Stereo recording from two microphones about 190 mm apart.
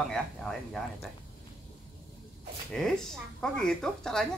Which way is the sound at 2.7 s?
5° left (ahead or behind).